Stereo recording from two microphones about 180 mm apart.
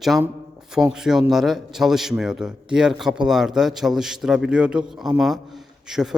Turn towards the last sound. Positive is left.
turn(degrees=-5)  # may be behind; listen again after turning